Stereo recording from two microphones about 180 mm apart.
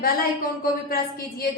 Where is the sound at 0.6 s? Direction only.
55° left (ahead or behind).